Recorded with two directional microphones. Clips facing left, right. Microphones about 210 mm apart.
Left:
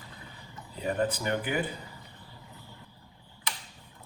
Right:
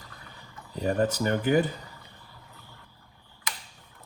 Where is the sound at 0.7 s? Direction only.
45° right (ahead or behind).